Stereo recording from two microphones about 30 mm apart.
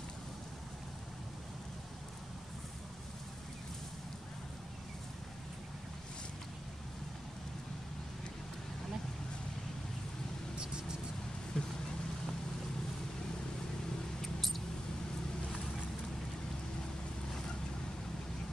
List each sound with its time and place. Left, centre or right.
11.6 s vehicle: left
14.2 s mouse: centre